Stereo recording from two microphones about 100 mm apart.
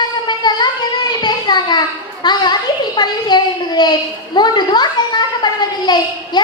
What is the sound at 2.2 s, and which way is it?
A child's voice, 45° left (ahead or behind).